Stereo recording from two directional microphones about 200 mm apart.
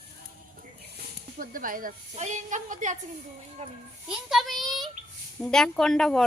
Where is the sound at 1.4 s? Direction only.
45° right (ahead or behind).